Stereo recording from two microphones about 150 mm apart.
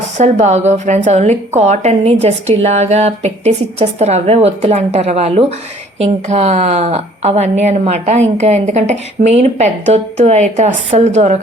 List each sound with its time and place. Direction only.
0.2 s a woman's voice: 50° right (ahead or behind)